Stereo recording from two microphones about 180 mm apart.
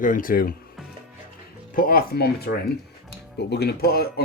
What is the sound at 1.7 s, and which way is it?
Speech, 55° left (ahead or behind).